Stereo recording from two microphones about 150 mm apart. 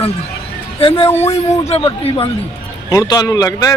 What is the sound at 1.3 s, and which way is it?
Speech, 45° left (ahead or behind).